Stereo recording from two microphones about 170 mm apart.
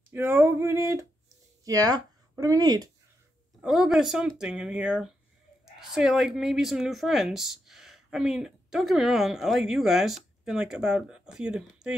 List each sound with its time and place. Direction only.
0.1 s a sound: 15° right (ahead or behind)
1.6 s speech: 20° right (ahead or behind)
3.6 s speech: 5° right (ahead or behind)